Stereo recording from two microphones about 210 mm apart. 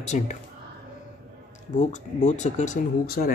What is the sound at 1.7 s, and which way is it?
Speech, 35° left (ahead or behind).